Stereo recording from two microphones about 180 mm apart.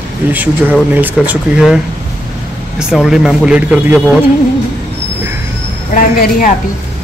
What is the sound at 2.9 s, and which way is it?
Speech, centre (ahead or behind).